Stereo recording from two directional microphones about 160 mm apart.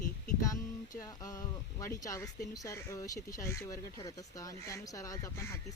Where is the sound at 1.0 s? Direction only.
20° left (ahead or behind).